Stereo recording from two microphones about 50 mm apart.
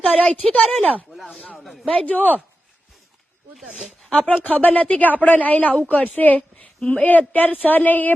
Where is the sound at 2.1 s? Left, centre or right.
Left.